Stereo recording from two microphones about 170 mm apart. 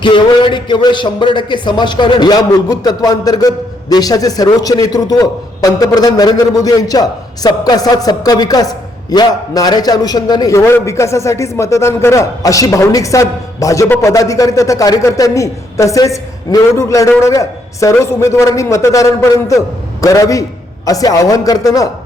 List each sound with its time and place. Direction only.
0.0 s a man's voice: 30° left (ahead or behind)